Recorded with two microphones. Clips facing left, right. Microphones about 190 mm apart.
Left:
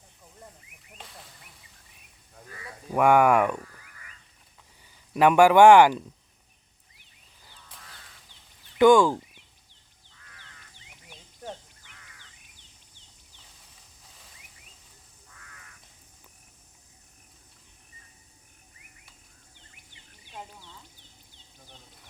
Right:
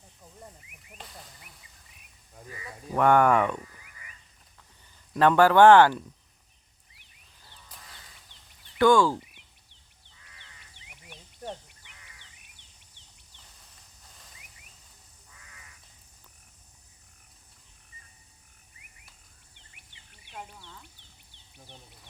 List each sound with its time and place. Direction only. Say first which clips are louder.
0.9 s a sound: right 1 dB; centre (ahead or behind)
2.3 s speech: right 1 dB; 5° right (ahead or behind)
2.9 s speech: left 1 dB; 10° left (ahead or behind)
4.8 s speech: left 1 dB; 10° left (ahead or behind)
8.8 s speech: left 3 dB; 15° left (ahead or behind)
10.1 s crow: left 2 dB; 15° right (ahead or behind)
11.4 s duck: right 1 dB; centre (ahead or behind)
11.8 s crow: left 1 dB; 20° right (ahead or behind)
14.0 s a sound: even; centre (ahead or behind)
19.8 s bird: left 2 dB; 65° right (ahead or behind)